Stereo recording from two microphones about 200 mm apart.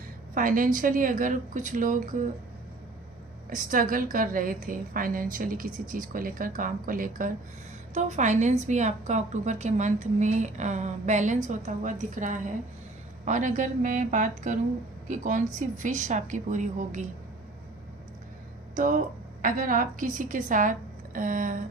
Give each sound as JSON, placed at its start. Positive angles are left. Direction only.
{"t": 0.3, "sound": "a woman's voice", "side_deg": -45}
{"t": 3.5, "sound": "a woman's voice", "side_deg": -45}
{"t": 18.8, "sound": "a woman's voice", "side_deg": -40}